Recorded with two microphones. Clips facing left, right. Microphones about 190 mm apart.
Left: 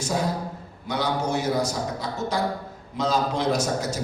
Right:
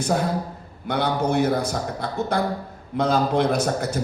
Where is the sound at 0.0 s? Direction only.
55° right (ahead or behind).